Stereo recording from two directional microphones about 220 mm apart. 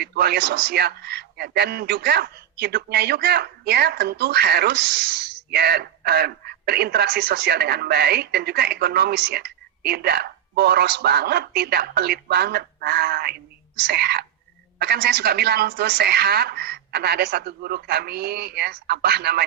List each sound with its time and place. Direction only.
0.0 s speech: 45° right (ahead or behind)